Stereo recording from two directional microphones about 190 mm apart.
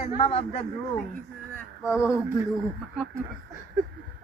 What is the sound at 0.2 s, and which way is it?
Speech, 30° left (ahead or behind).